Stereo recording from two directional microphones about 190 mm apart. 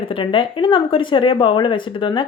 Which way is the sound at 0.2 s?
25° left (ahead or behind).